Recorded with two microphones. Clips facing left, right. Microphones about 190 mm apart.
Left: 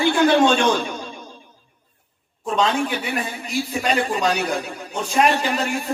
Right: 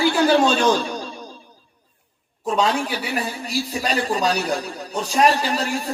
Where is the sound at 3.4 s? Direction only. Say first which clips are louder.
Left 1 dB; 35° right (ahead or behind).